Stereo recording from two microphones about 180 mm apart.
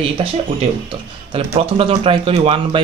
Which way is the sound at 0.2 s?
30° right (ahead or behind).